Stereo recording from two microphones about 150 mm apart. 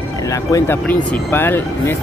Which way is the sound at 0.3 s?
20° left (ahead or behind).